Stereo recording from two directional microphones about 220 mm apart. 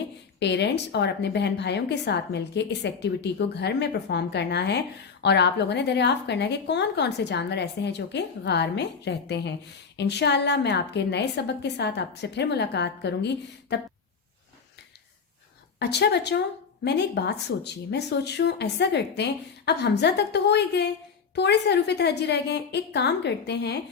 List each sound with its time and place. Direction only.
0.3 s a woman's voice: 50° left (ahead or behind)
15.8 s a woman's voice: 50° left (ahead or behind)